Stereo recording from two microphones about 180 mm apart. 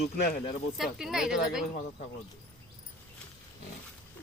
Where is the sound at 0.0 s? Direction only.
60° left (ahead or behind).